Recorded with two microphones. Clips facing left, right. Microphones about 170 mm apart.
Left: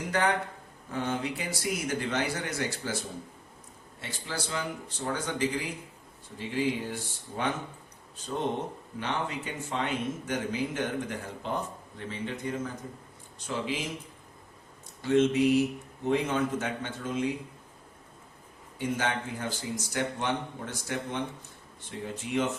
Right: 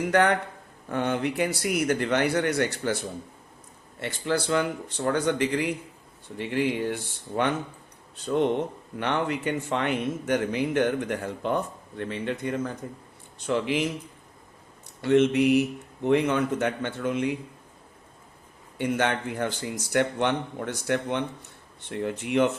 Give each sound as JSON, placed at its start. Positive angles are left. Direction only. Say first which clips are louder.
{"t": 0.1, "sound": "speech", "louder": "right 4 dB", "side_deg": -65}
{"t": 4.0, "sound": "a man's voice", "louder": "right 10 dB", "side_deg": -65}
{"t": 15.0, "sound": "a man's voice", "louder": "right 3 dB", "side_deg": -65}
{"t": 18.8, "sound": "speech", "louder": "right 5 dB", "side_deg": -65}